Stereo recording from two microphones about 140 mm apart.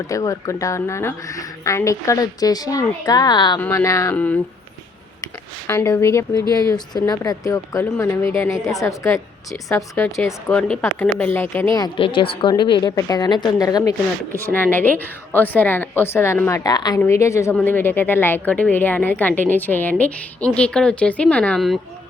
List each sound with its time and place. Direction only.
0.1 s speech: 25° left (ahead or behind)
4.1 s speech: 10° left (ahead or behind)
5.6 s speech: 15° left (ahead or behind)
10.5 s speech: 5° left (ahead or behind)
11.7 s a woman's voice: 35° left (ahead or behind)
14.3 s speech: 15° left (ahead or behind)
16.6 s speech: 30° left (ahead or behind); by 21.8 s 5° left (ahead or behind)